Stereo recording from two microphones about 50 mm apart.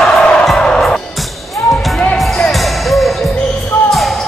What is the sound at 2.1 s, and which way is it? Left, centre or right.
Music, centre.